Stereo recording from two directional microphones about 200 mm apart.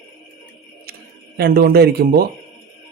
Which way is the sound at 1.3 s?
50° right (ahead or behind).